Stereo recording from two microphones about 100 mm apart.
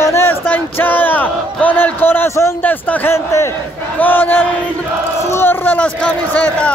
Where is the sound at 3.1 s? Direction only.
25° left (ahead or behind).